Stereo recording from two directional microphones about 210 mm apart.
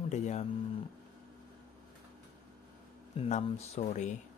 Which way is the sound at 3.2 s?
35° left (ahead or behind).